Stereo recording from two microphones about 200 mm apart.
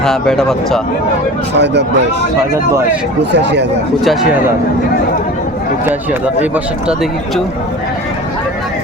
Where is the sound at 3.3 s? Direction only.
60° right (ahead or behind).